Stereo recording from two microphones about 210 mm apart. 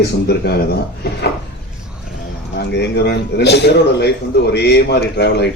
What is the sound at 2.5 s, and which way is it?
A man's voice, 55° left (ahead or behind).